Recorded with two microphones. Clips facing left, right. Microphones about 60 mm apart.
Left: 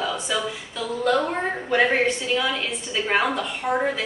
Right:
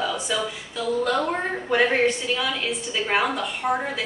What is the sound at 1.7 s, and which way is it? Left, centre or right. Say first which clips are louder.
A woman's voice: even; centre.